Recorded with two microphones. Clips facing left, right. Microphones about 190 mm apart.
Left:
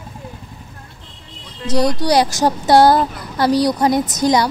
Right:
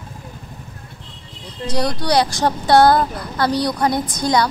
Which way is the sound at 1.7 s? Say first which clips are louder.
Left 4 dB; 15° left (ahead or behind).